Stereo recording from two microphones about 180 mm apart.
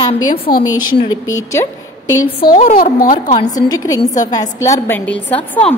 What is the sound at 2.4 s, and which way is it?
Speech, 50° left (ahead or behind).